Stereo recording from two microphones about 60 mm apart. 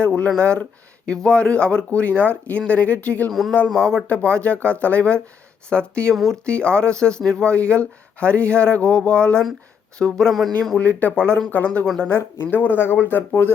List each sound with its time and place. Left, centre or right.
0.0 s speech: centre
3.7 s speech: centre
4.1 s speech: left; by 10.8 s centre
10.8 s speech: left